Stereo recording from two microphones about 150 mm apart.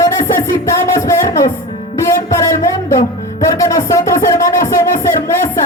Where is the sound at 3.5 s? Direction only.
20° left (ahead or behind).